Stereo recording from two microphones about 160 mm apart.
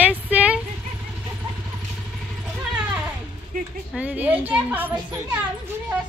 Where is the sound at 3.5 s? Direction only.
60° right (ahead or behind).